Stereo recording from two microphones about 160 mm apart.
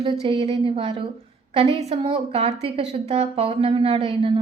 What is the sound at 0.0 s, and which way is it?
Speech, 35° right (ahead or behind).